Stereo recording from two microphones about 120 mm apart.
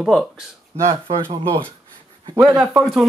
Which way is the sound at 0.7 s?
60° right (ahead or behind).